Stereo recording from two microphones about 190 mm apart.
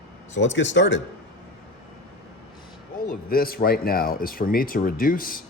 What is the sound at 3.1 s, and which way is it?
Speech, 50° left (ahead or behind).